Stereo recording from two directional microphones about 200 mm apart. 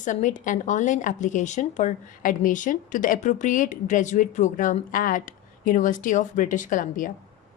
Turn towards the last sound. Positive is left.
turn(degrees=40)  # may be behind; listen again after turning